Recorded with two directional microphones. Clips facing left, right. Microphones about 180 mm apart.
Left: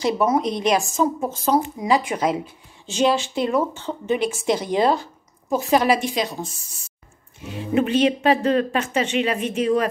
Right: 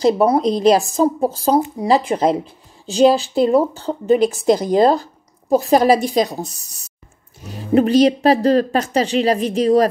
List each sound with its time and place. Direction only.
0.0 s speech: 35° right (ahead or behind)